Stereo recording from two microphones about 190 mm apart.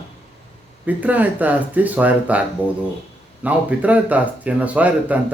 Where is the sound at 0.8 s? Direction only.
10° right (ahead or behind).